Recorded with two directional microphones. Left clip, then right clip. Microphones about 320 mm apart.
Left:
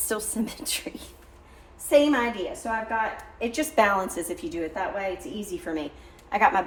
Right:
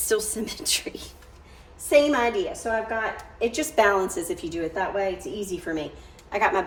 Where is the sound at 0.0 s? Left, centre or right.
Centre.